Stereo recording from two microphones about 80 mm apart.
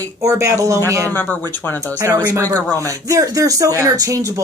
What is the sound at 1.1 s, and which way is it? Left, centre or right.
Speech, left.